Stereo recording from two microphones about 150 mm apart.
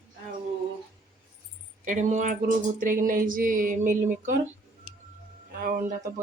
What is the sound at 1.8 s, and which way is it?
Speech, 55° right (ahead or behind).